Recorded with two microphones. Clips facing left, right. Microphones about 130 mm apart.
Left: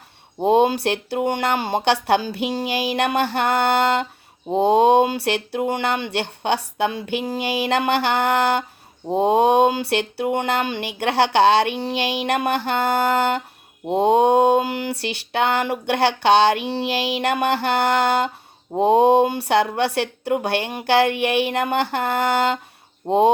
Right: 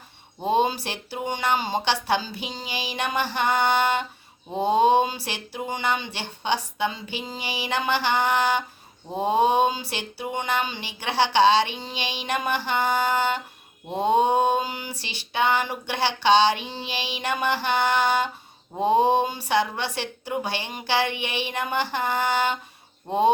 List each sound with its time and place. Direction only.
0.4 s mantra: 65° left (ahead or behind)
4.5 s mantra: 75° left (ahead or behind); by 13.4 s 60° left (ahead or behind)
13.8 s mantra: 70° left (ahead or behind)
23.0 s speech: 70° left (ahead or behind)